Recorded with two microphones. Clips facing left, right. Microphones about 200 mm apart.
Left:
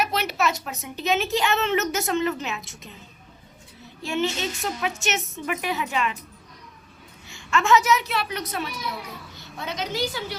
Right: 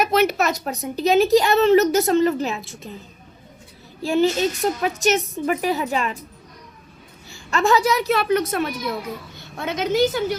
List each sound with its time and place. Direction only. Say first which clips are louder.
0.0 s a woman's voice: right 6 dB; 50° right (ahead or behind)
4.0 s a woman's voice: right 8 dB; 35° right (ahead or behind)
7.3 s a woman's voice: right 2 dB; 35° right (ahead or behind)